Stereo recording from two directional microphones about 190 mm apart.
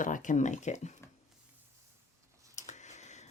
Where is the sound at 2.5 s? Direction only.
40° left (ahead or behind).